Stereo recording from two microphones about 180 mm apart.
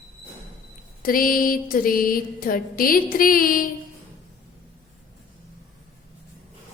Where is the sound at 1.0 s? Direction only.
50° left (ahead or behind).